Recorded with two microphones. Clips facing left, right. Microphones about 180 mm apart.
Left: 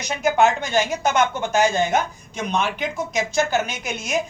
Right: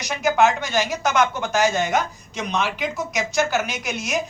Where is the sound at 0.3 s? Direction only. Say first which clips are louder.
Even; 30° left (ahead or behind).